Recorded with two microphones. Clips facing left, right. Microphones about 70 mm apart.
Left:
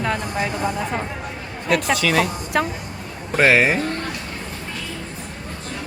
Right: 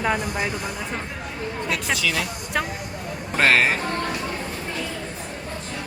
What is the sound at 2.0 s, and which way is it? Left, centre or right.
Speech, left.